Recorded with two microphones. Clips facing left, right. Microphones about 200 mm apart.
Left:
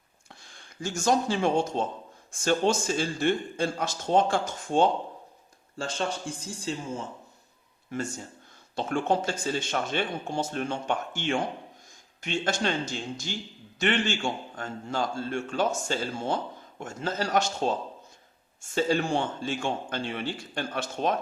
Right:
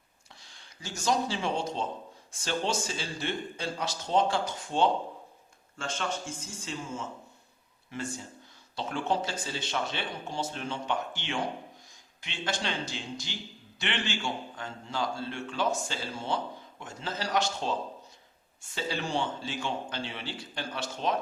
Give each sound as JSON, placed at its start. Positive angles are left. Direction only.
{"t": 0.4, "sound": "a man's voice", "side_deg": 50}
{"t": 5.7, "sound": "a man's voice", "side_deg": 35}
{"t": 7.9, "sound": "a man's voice", "side_deg": 45}